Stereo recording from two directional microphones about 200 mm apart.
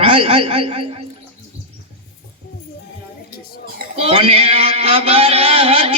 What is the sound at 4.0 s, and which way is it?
A man's voice, 30° right (ahead or behind).